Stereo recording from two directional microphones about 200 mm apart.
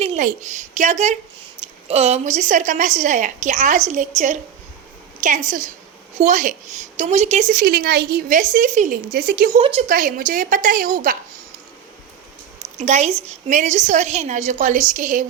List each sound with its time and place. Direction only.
0.0 s a sound: 30° right (ahead or behind)
0.8 s a woman's voice: 35° right (ahead or behind)
5.5 s a woman's voice: 40° right (ahead or behind)
7.6 s a woman's voice: 50° right (ahead or behind)
9.1 s a woman's voice: 50° right (ahead or behind)
9.6 s a woman's voice: 30° right (ahead or behind)
9.9 s a woman's voice: 45° right (ahead or behind)
12.8 s a woman's voice: 35° right (ahead or behind)